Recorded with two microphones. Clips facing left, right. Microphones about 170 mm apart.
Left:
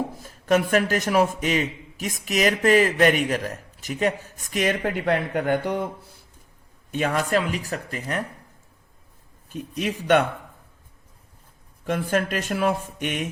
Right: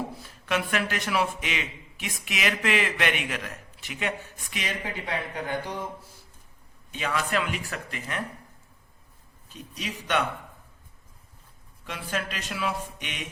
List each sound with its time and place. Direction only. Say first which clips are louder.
0.2 s a man's voice: left 11 dB; 45° left (ahead or behind)
4.8 s speech: left 9 dB; 60° left (ahead or behind)
6.9 s a man's voice: left 6 dB; 50° left (ahead or behind)
9.5 s speech: left 9 dB; 50° left (ahead or behind)
11.9 s speech: left 9 dB; 50° left (ahead or behind)